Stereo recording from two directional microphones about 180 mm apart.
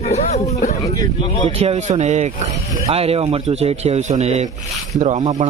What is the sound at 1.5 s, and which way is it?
A man's voice, 35° right (ahead or behind).